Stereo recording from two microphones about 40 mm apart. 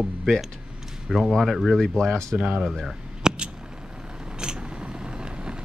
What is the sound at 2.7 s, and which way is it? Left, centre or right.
Speech, centre.